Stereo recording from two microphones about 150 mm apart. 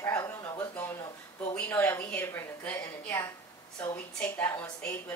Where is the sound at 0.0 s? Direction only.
20° left (ahead or behind).